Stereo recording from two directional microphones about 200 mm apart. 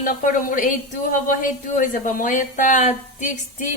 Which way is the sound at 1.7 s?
40° left (ahead or behind).